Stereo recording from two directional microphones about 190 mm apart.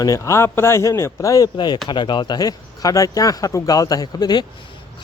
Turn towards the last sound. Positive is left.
turn(degrees=20)  # may be behind; listen again after turning